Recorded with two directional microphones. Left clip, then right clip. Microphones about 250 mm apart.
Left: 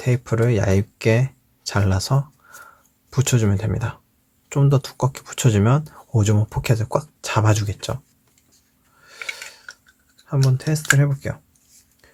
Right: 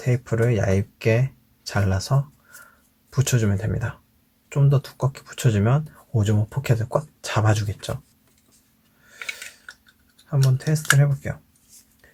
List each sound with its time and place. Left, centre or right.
0.0 s speech: centre
10.2 s speech: centre